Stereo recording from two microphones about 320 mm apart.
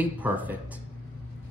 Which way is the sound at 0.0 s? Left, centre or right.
Centre.